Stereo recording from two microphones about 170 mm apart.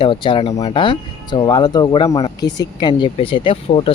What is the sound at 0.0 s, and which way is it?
Speech, 30° left (ahead or behind).